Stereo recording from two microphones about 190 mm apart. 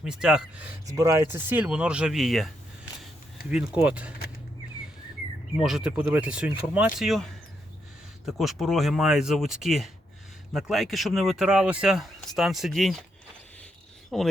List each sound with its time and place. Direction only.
0.0 s speech: 5° right (ahead or behind)
0.9 s speech: 15° right (ahead or behind); by 2.5 s centre (ahead or behind)
3.5 s speech: 5° right (ahead or behind)
5.5 s speech: 5° right (ahead or behind)
8.3 s speech: centre (ahead or behind)
14.1 s speech: centre (ahead or behind)